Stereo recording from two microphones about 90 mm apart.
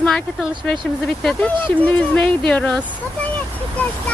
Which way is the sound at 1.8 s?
15° left (ahead or behind).